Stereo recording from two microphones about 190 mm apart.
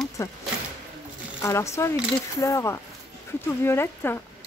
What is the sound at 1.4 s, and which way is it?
Speech, 15° left (ahead or behind).